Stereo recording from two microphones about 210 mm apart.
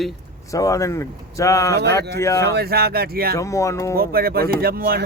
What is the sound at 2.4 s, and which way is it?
Speech, 50° right (ahead or behind).